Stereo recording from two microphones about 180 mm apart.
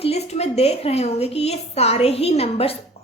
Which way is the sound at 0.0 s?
35° left (ahead or behind).